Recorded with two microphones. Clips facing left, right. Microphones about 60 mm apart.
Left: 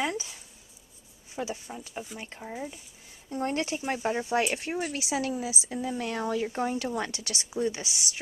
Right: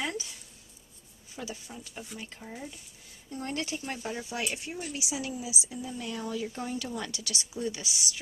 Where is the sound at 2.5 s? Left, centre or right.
Centre.